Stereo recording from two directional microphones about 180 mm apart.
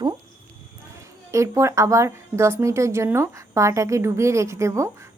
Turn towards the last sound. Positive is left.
turn(degrees=-15)  # may be behind; listen again after turning